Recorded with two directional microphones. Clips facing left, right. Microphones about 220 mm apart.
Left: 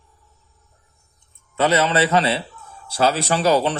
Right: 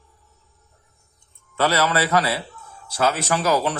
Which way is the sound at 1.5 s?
20° left (ahead or behind).